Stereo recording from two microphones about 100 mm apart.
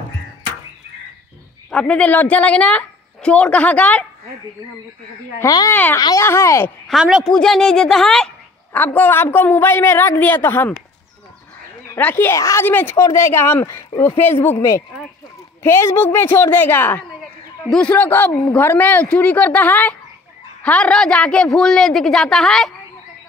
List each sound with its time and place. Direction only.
1.7 s a woman's voice: 10° left (ahead or behind)
5.4 s a child's voice: 40° left (ahead or behind)
5.7 s speech: 20° left (ahead or behind)
5.9 s a child's voice: 40° left (ahead or behind)
6.9 s a man's voice: 5° right (ahead or behind)
7.2 s a woman's voice: 5° left (ahead or behind)
8.7 s speech: 20° left (ahead or behind)
12.0 s speech: 20° left (ahead or behind)
17.6 s a woman's voice: 5° left (ahead or behind)
17.9 s a woman's voice: 20° left (ahead or behind)